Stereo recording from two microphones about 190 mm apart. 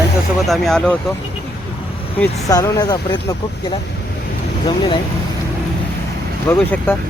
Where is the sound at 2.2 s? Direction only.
15° left (ahead or behind).